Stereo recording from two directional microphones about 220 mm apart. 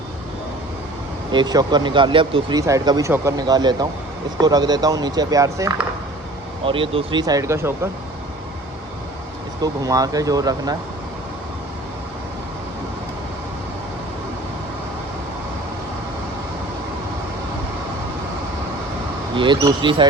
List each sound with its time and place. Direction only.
1.3 s speech: 20° right (ahead or behind)
9.6 s speech: 15° right (ahead or behind)
19.4 s speech: 20° right (ahead or behind)